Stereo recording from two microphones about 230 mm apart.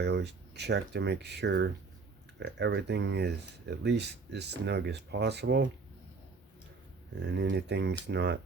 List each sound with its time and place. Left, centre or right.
0.0 s speech: right
7.2 s speech: right